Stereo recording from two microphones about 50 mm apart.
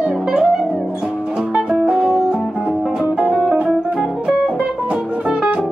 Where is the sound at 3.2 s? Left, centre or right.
Centre.